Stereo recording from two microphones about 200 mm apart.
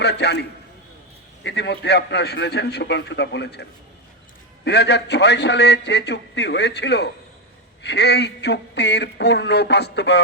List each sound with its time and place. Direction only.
0.0 s a man's voice: 55° left (ahead or behind)
1.5 s a man's voice: 55° left (ahead or behind)